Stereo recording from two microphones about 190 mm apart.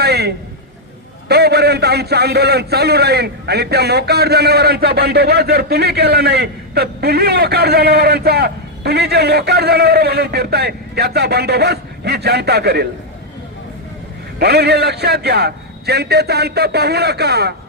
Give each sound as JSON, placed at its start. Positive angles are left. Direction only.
{"t": 0.0, "sound": "a sound", "side_deg": -60}
{"t": 1.3, "sound": "a man's voice", "side_deg": -60}
{"t": 14.3, "sound": "a man's voice", "side_deg": -60}